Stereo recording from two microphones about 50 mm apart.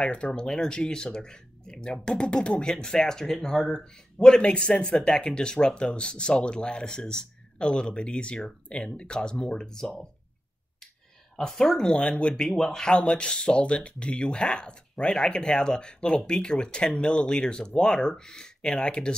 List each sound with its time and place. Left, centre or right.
0.0 s speech: left
0.3 s speech: centre
11.3 s speech: centre
12.0 s speech: left